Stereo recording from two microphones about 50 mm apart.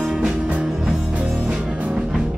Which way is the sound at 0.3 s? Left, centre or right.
Right.